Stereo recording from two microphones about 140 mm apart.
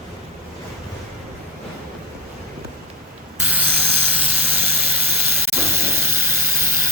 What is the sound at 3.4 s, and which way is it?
Vehicle, 10° right (ahead or behind).